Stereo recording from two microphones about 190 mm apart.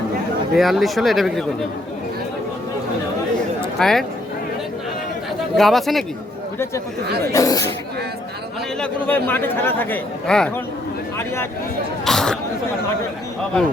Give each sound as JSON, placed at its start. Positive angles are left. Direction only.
{"t": 0.5, "sound": "speech", "side_deg": 0}
{"t": 3.8, "sound": "speech", "side_deg": 0}
{"t": 5.5, "sound": "speech", "side_deg": 0}
{"t": 7.3, "sound": "speech", "side_deg": 15}
{"t": 8.8, "sound": "speech", "side_deg": 10}
{"t": 12.0, "sound": "speech", "side_deg": 0}